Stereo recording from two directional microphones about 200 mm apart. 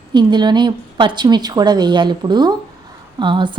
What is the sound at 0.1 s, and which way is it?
A woman's voice, 20° right (ahead or behind).